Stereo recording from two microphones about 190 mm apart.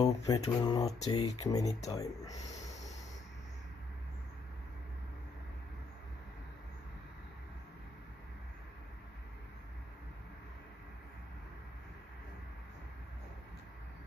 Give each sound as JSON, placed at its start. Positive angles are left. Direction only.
{"t": 0.0, "sound": "speech", "side_deg": 20}